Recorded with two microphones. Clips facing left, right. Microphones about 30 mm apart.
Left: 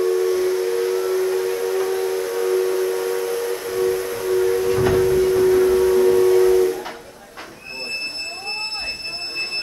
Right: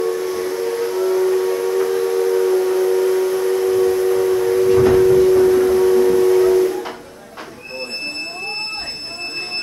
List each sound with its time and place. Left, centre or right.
0.0 s steam whistle: centre